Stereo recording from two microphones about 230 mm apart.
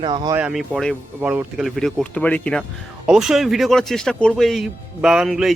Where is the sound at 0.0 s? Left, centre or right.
Centre.